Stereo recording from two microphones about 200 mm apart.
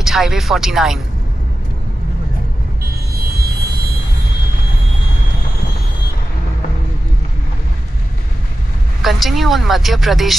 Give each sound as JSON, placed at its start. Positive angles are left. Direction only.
{"t": 0.0, "sound": "speech", "side_deg": 0}
{"t": 3.2, "sound": "vehicle", "side_deg": -50}
{"t": 9.0, "sound": "speech", "side_deg": 0}